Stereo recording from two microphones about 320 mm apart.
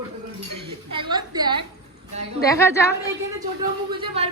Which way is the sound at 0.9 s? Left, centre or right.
Centre.